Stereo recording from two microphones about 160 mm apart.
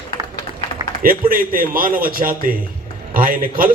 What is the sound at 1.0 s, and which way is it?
A man's voice, 60° right (ahead or behind).